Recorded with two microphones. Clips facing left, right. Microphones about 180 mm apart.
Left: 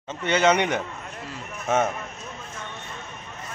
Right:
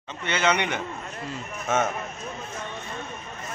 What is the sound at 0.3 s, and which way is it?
Speech, 45° left (ahead or behind).